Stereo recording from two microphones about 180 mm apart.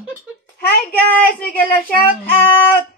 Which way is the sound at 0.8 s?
10° left (ahead or behind).